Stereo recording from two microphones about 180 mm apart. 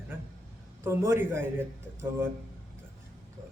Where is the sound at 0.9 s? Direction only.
15° right (ahead or behind).